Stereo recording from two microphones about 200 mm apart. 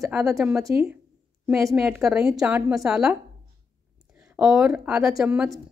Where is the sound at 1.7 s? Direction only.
5° right (ahead or behind).